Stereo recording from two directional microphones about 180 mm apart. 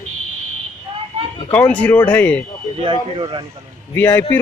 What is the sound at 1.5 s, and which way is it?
Speech, 10° left (ahead or behind).